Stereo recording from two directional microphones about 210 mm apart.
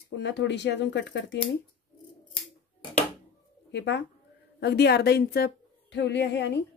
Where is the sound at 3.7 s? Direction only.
55° left (ahead or behind).